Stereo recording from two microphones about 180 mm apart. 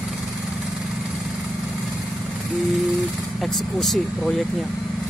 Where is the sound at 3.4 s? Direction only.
Centre (ahead or behind).